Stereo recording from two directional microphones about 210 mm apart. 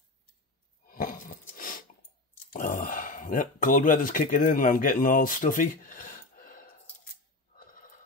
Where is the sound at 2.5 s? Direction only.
40° left (ahead or behind).